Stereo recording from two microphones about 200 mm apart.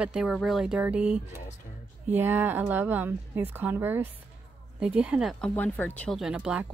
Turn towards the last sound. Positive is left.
turn(degrees=-5)  # may be behind; listen again after turning